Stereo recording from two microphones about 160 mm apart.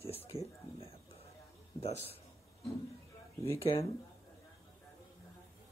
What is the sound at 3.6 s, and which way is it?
Speech, 35° left (ahead or behind).